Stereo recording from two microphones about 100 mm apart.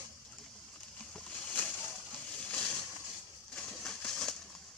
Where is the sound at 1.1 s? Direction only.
10° left (ahead or behind).